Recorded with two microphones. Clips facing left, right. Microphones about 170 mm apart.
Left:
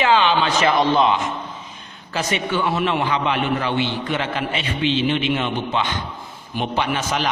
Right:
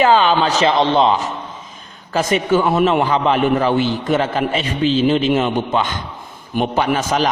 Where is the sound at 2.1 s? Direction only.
45° right (ahead or behind).